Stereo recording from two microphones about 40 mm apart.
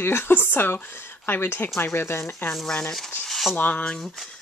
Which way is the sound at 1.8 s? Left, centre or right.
Left.